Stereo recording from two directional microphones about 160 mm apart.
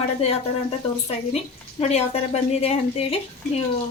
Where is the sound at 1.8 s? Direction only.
40° left (ahead or behind).